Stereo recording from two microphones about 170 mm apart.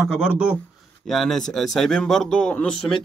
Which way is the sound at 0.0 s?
5° right (ahead or behind).